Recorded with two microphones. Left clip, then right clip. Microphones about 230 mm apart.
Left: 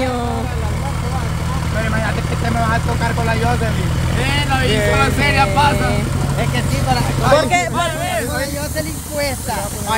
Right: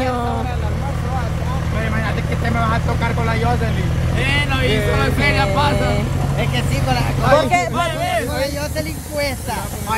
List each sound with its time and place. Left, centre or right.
4.2 s speech: centre
4.9 s speech: centre
6.5 s speech: centre
7.2 s speech: centre
7.7 s a sound: centre